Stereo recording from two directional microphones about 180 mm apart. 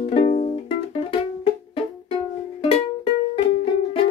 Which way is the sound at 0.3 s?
35° left (ahead or behind).